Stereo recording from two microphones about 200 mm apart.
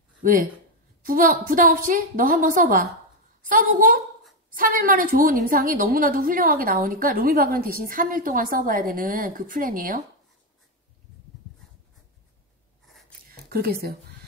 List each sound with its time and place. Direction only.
0.2 s a woman's voice: 45° right (ahead or behind)
13.5 s a woman's voice: 50° right (ahead or behind)